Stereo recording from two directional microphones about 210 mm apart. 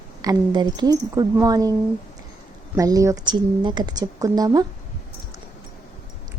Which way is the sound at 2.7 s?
15° right (ahead or behind).